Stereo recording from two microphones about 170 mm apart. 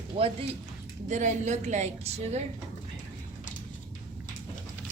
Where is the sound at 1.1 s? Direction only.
45° right (ahead or behind).